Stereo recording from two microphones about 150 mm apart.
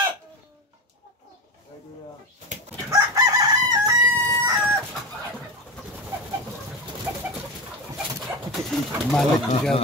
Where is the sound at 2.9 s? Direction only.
25° right (ahead or behind).